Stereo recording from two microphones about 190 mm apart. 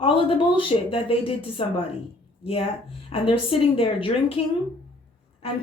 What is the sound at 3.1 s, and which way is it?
A woman's voice, 30° left (ahead or behind).